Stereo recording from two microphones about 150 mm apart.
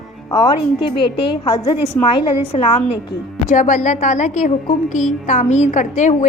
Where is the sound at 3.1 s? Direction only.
55° left (ahead or behind).